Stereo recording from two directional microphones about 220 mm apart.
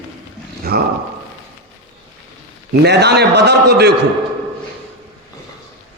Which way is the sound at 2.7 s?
50° right (ahead or behind).